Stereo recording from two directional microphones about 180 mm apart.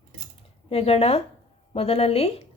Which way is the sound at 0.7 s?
35° left (ahead or behind).